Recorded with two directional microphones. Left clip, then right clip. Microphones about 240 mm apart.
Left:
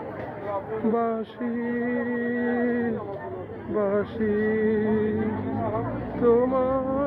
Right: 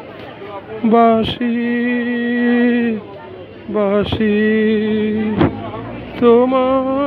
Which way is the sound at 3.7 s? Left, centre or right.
Right.